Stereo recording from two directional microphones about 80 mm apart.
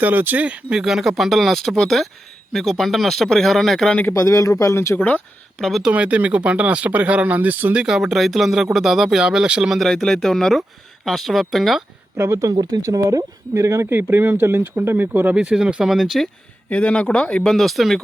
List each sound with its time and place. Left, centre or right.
0.0 s speech: right; by 4.0 s centre
4.1 s speech: left
5.5 s speech: centre
5.8 s speech: centre
12.1 s speech: right
13.5 s speech: right
15.4 s speech: centre
16.6 s speech: centre
17.5 s speech: centre